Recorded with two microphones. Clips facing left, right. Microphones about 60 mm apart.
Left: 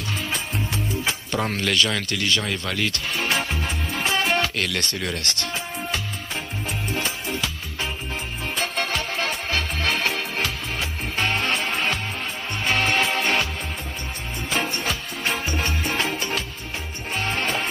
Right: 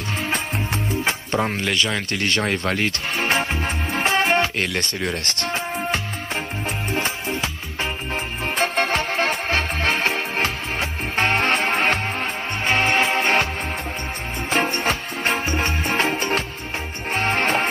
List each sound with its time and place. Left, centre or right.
1.4 s speech: right
5.4 s music: right
8.5 s music: right
12.6 s music: right
14.5 s music: right